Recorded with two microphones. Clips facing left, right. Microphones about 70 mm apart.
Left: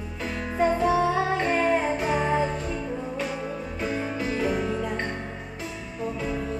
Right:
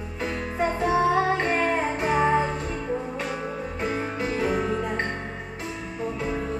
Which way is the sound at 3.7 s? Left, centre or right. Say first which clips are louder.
Even; right.